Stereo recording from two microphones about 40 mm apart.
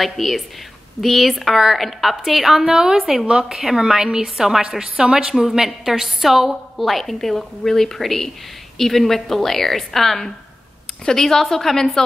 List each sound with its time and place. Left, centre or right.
0.0 s a woman's voice: centre